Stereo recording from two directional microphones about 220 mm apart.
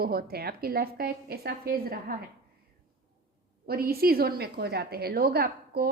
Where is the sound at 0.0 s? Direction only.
45° right (ahead or behind).